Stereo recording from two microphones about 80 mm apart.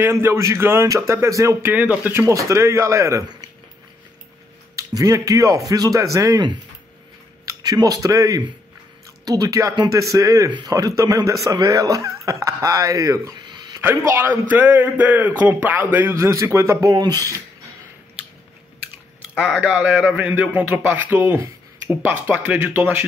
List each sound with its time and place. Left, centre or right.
0.0 s a man's voice: right
1.7 s a man's voice: right
2.2 s a man's voice: right
4.7 s speech: right
7.4 s speech: right
13.4 s a sound: right
13.7 s a man's voice: right
16.2 s a man's voice: right
16.9 s speech: right
19.3 s a man's voice: centre